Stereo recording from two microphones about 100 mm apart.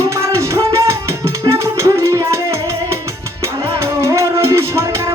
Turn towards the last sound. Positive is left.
turn(degrees=-30)  # may be behind; listen again after turning